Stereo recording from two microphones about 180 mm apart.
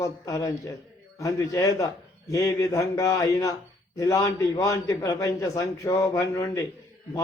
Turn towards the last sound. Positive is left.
turn(degrees=20)  # may be behind; listen again after turning